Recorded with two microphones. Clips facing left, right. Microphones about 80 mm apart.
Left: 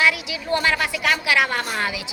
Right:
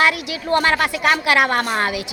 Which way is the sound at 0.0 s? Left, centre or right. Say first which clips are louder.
Right 3 dB; right.